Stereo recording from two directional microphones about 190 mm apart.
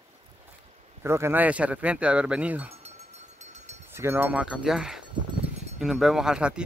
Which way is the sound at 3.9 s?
10° right (ahead or behind).